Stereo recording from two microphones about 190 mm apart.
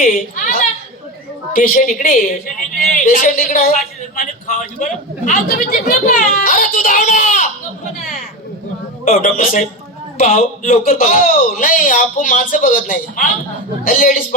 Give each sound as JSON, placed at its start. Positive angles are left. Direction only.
{"t": 0.0, "sound": "a woman's voice", "side_deg": 45}
{"t": 1.5, "sound": "a man's voice", "side_deg": 45}
{"t": 9.0, "sound": "a man's voice", "side_deg": 40}